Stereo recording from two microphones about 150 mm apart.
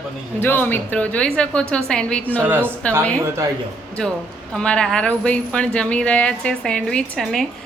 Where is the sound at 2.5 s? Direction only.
15° right (ahead or behind).